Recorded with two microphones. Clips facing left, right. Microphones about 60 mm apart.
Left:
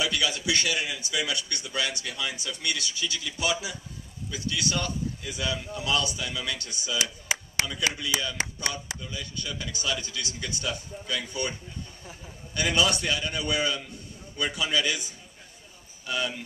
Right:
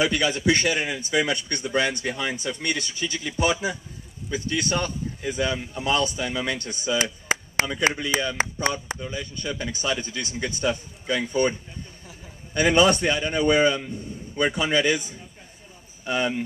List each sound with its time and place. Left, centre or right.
0.0 s speech: right
12.5 s speech: right